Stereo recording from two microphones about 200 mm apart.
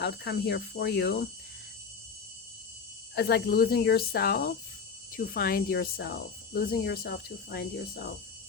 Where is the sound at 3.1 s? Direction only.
55° left (ahead or behind).